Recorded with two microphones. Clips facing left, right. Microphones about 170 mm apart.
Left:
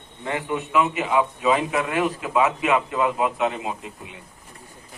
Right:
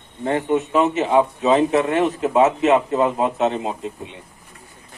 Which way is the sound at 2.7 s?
30° right (ahead or behind).